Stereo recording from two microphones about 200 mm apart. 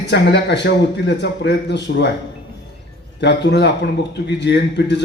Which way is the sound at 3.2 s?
60° left (ahead or behind).